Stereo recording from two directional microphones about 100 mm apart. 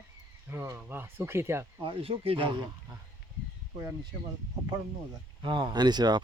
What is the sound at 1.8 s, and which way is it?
Speech, 70° right (ahead or behind).